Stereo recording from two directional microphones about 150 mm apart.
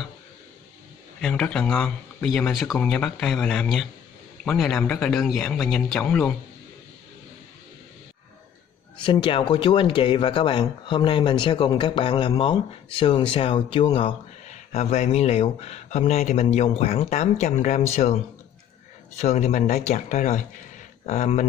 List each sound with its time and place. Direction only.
1.2 s a man's voice: 5° left (ahead or behind)
9.0 s speech: 35° left (ahead or behind)
14.5 s speech: 45° left (ahead or behind)